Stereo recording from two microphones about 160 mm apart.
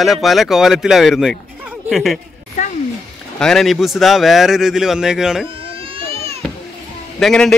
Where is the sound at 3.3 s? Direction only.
5° left (ahead or behind).